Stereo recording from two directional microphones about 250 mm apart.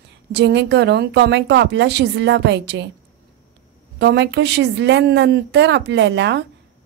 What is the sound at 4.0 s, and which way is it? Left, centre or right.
A woman's voice, right.